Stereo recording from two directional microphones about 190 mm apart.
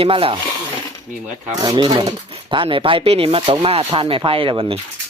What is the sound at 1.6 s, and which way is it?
Speech, 25° right (ahead or behind).